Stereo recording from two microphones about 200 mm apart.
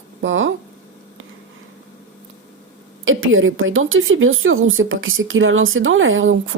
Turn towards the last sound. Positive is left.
turn(degrees=-75)  # may be behind; listen again after turning